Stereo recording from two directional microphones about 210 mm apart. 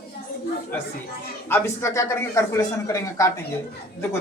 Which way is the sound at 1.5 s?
15° left (ahead or behind).